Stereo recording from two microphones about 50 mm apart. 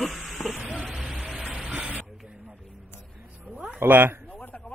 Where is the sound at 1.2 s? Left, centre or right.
Right.